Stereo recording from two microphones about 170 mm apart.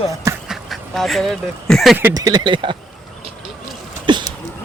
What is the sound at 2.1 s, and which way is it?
Speech, 20° right (ahead or behind).